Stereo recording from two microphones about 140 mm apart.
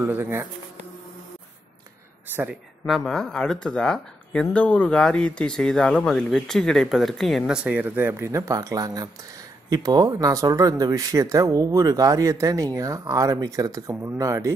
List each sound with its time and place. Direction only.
0.0 s speech: 15° right (ahead or behind)
2.9 s speech: 5° left (ahead or behind); by 14.5 s 25° right (ahead or behind)